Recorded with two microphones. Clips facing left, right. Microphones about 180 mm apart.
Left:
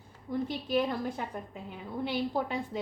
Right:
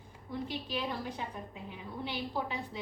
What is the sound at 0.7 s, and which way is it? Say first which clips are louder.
A woman's voice: left 7 dB; 50° left (ahead or behind).